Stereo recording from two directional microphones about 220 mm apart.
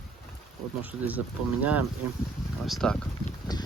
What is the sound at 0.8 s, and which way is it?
Speech, 5° right (ahead or behind).